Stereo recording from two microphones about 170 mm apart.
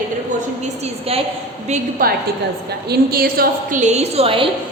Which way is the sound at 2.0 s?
60° right (ahead or behind).